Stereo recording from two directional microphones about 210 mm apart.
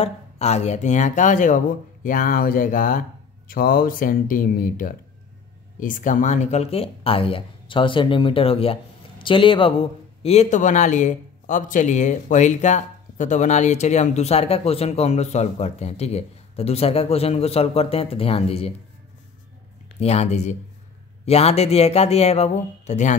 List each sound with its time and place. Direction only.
0.0 s speech: 30° left (ahead or behind)
20.0 s speech: 30° left (ahead or behind)